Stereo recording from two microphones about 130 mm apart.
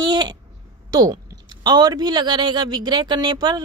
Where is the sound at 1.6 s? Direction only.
30° right (ahead or behind).